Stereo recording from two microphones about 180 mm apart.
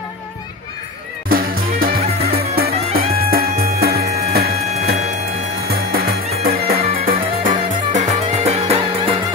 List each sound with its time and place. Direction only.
1.3 s music: 55° right (ahead or behind)
7.1 s music: 45° right (ahead or behind)